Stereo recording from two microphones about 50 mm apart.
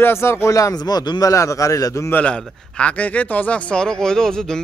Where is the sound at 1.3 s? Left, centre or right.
Left.